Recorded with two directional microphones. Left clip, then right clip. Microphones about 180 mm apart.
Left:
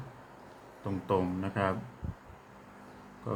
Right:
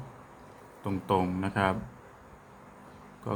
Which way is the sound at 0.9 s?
25° right (ahead or behind).